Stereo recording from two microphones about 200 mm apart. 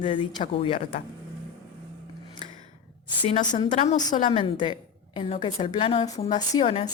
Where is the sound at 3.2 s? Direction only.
30° left (ahead or behind).